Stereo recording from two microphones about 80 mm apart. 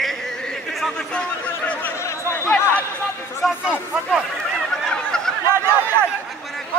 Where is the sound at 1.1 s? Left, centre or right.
Centre.